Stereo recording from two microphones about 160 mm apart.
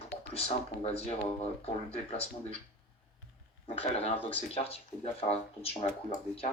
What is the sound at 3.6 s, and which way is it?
Speech, 40° left (ahead or behind).